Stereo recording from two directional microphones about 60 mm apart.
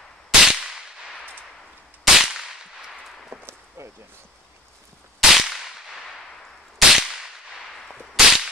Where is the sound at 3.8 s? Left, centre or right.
Right.